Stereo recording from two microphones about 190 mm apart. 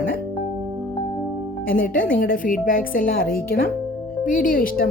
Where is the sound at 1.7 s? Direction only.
45° left (ahead or behind).